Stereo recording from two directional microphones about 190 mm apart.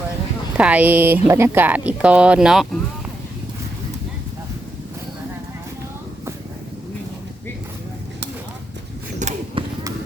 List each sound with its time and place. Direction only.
0.5 s speech: 10° right (ahead or behind)
9.1 s arrow: 40° right (ahead or behind)